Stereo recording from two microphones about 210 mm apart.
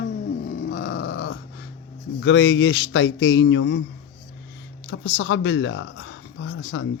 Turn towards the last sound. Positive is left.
turn(degrees=60)  # may be behind; listen again after turning